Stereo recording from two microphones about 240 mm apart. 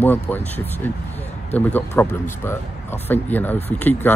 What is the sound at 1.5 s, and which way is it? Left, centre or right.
Speech, centre.